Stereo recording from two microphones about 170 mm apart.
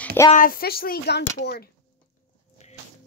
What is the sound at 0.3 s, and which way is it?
Speech, 55° left (ahead or behind).